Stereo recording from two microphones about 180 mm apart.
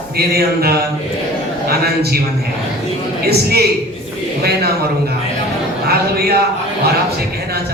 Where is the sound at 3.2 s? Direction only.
60° right (ahead or behind).